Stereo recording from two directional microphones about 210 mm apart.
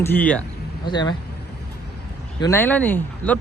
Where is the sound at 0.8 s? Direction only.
20° left (ahead or behind).